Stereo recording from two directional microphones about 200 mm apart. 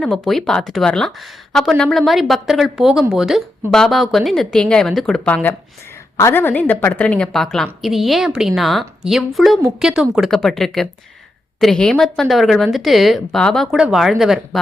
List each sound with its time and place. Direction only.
0.0 s a woman's voice: centre (ahead or behind)